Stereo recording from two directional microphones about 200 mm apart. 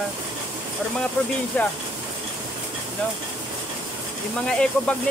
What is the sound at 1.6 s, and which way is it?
Speech, 5° left (ahead or behind).